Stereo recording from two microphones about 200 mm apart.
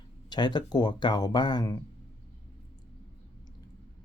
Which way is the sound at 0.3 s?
20° left (ahead or behind).